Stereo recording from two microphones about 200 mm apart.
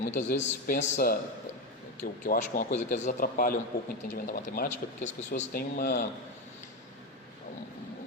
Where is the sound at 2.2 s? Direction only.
45° left (ahead or behind).